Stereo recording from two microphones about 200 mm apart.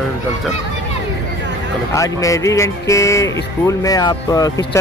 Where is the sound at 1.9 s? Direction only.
15° left (ahead or behind).